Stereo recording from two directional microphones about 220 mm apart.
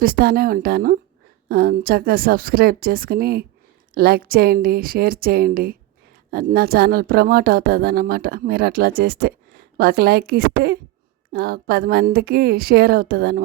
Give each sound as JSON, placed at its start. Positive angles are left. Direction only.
{"t": 0.0, "sound": "speech", "side_deg": -45}